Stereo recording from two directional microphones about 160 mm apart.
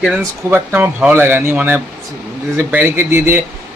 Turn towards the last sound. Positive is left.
turn(degrees=-15)  # may be behind; listen again after turning